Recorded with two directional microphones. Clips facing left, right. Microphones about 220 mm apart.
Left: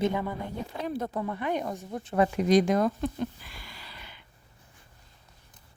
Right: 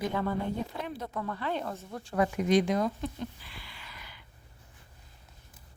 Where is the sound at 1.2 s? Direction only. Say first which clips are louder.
Left 3 dB; 15° left (ahead or behind).